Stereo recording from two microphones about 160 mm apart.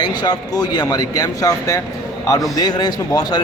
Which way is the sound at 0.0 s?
25° left (ahead or behind).